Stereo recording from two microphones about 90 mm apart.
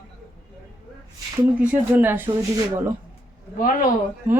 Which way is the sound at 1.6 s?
15° right (ahead or behind).